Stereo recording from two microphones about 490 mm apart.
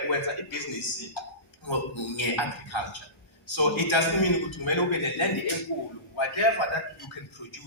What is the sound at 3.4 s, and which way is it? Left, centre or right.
A man's voice, left.